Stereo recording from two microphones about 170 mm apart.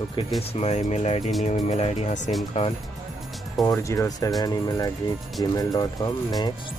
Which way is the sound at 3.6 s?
20° left (ahead or behind).